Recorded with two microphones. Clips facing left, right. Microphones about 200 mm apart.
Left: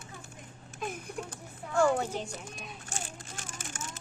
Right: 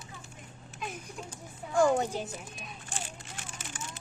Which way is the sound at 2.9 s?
45° left (ahead or behind).